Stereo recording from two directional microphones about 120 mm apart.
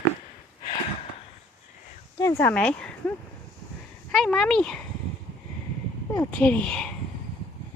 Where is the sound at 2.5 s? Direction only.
10° left (ahead or behind).